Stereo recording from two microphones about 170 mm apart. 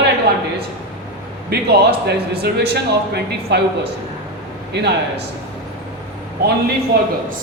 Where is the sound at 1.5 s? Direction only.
75° right (ahead or behind).